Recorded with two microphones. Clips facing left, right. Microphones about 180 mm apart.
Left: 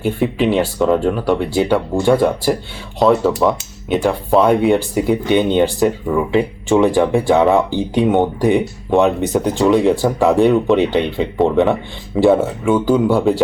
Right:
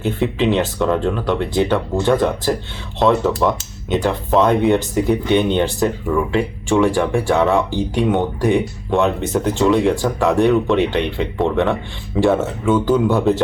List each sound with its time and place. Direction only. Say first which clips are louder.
0.0 s speech: left 2 dB; 10° left (ahead or behind)